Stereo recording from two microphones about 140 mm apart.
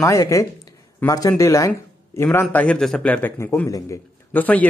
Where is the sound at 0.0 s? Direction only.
20° left (ahead or behind).